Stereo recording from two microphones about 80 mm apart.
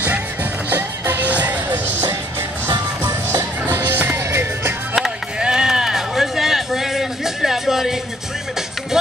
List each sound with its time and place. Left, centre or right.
0.7 s music: right
3.6 s music: right
4.9 s a sound: centre
9.0 s music: centre